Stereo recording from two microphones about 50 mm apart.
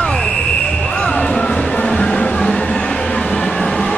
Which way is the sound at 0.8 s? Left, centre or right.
Centre.